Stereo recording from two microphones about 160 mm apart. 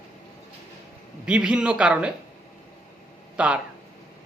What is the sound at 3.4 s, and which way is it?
Speech, 5° right (ahead or behind).